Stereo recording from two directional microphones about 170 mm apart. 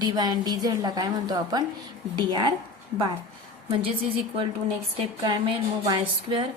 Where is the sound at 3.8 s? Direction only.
30° right (ahead or behind).